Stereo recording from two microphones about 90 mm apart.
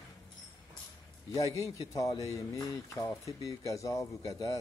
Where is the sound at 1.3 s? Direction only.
35° left (ahead or behind).